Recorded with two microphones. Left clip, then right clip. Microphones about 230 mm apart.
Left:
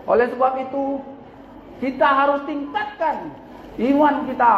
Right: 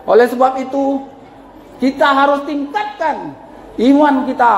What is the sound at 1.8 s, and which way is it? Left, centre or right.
A man's voice, right.